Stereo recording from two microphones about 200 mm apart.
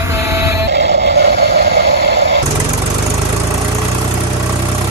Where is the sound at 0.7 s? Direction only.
65° right (ahead or behind).